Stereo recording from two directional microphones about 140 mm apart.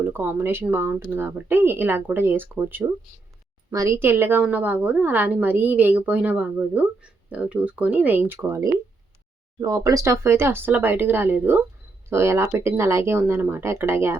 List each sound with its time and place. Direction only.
0.0 s a woman's voice: 15° right (ahead or behind)